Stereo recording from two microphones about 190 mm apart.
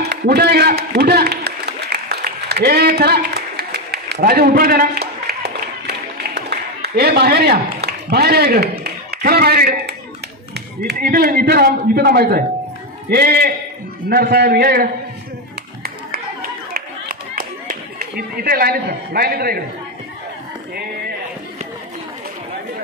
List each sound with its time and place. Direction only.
0.1 s a sound: 55° right (ahead or behind)
10.5 s a man's voice: 55° right (ahead or behind)
16.7 s clapping: 50° right (ahead or behind)